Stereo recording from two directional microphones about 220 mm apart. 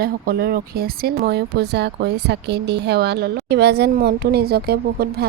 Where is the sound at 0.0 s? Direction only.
45° right (ahead or behind).